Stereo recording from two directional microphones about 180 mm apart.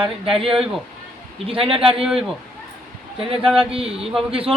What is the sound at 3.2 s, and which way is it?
Speech, 30° right (ahead or behind).